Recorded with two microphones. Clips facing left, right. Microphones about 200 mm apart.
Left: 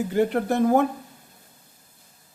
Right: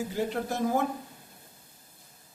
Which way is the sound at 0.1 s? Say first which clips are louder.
Left 8 dB; 60° left (ahead or behind).